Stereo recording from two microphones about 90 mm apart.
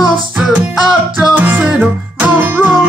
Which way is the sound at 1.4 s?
15° right (ahead or behind).